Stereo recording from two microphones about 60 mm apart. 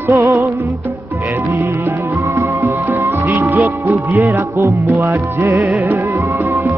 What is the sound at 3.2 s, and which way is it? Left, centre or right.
Music, right.